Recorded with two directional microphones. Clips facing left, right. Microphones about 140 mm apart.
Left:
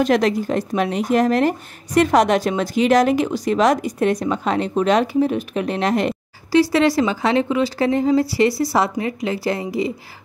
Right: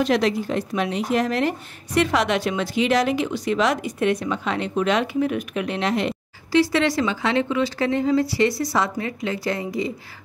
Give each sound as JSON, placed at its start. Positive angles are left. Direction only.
{"t": 0.0, "sound": "speech", "side_deg": 45}